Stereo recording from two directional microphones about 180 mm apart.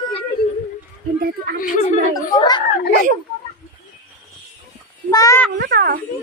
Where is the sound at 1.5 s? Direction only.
50° left (ahead or behind).